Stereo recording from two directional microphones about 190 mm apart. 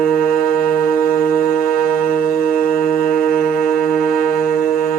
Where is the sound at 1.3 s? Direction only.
50° left (ahead or behind).